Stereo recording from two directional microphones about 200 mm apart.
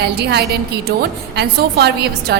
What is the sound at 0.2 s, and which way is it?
A woman's voice, 55° right (ahead or behind).